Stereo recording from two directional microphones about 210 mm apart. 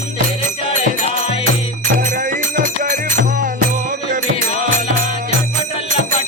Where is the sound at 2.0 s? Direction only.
40° right (ahead or behind).